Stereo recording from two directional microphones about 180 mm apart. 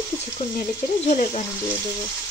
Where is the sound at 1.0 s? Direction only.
40° left (ahead or behind).